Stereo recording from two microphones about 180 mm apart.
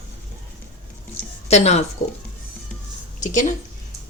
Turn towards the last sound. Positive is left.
turn(degrees=45)  # may be behind; listen again after turning